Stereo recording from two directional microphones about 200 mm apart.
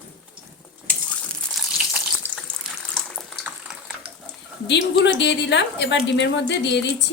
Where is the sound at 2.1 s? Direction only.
Centre (ahead or behind).